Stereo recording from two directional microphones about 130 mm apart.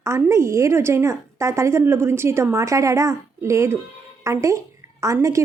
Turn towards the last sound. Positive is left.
turn(degrees=-25)  # may be behind; listen again after turning